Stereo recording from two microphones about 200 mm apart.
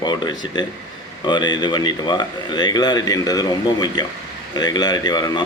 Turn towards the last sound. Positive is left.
turn(degrees=20)  # may be behind; listen again after turning